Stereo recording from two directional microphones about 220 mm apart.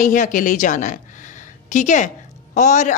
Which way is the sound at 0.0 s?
35° left (ahead or behind).